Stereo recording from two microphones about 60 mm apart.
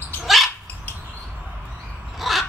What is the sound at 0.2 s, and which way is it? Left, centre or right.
Dog, centre.